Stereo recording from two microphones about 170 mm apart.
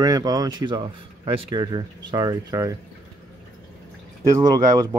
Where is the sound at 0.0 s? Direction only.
20° right (ahead or behind).